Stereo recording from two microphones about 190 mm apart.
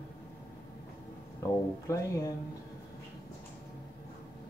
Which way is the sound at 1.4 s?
15° left (ahead or behind).